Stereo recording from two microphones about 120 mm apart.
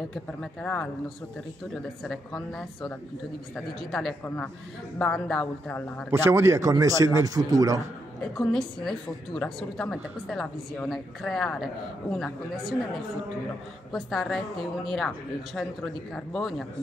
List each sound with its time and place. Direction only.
0.1 s a woman's voice: 5° left (ahead or behind)
3.5 s a woman's voice: 5° left (ahead or behind)
6.0 s a man's voice: 20° right (ahead or behind)
8.2 s a woman's voice: 5° left (ahead or behind)
16.3 s a woman's voice: centre (ahead or behind)